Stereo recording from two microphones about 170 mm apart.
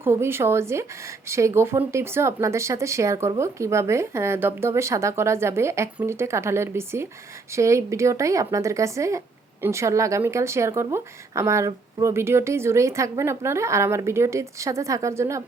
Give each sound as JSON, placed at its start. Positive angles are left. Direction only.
{"t": 0.0, "sound": "speech", "side_deg": -15}